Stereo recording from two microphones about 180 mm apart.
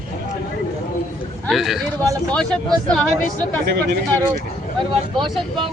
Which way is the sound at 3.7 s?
60° right (ahead or behind).